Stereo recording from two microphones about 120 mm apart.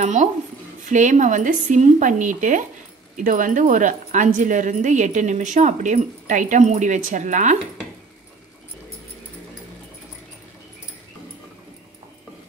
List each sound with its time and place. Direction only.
0.0 s speech: 90° right